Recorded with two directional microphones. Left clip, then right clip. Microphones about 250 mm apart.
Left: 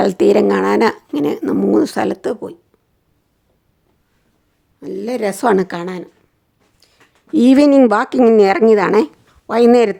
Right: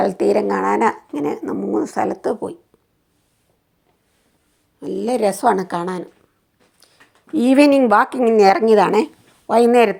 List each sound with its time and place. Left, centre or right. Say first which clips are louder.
0.3 s speech: left 5 dB; centre
1.4 s speech: left 7 dB; left
2.2 s a woman's voice: even; centre
4.8 s a woman's voice: right 2 dB; centre
5.3 s speech: left 2 dB; centre
7.3 s speech: left 3 dB; left
8.4 s a woman's voice: right 3 dB; centre
9.7 s speech: left 1 dB; centre